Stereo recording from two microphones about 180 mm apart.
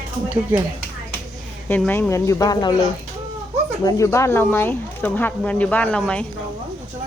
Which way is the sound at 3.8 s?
15° left (ahead or behind).